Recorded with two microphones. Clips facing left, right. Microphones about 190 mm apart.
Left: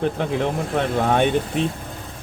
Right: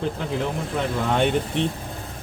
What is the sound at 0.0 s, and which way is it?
Speech, 60° left (ahead or behind).